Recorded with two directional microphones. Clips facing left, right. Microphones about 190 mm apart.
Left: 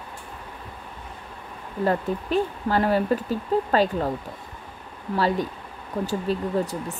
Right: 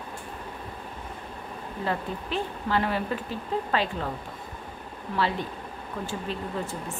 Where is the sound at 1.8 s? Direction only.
45° left (ahead or behind).